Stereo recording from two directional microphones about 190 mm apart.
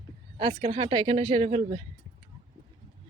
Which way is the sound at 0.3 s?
30° right (ahead or behind).